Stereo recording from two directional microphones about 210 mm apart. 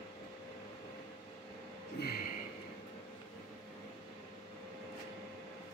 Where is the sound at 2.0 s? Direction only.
45° left (ahead or behind).